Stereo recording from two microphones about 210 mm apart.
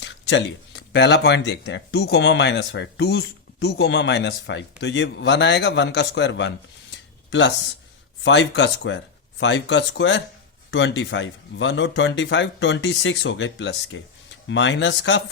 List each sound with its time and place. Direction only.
0.0 s speech: 60° left (ahead or behind)